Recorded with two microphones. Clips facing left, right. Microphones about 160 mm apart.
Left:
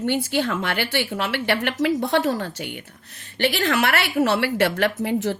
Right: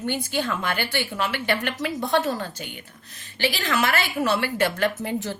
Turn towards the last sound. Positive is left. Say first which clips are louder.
# left 5 dB
turn(degrees=70)  # may be behind; listen again after turning